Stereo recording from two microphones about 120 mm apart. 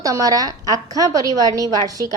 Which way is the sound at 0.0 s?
30° right (ahead or behind).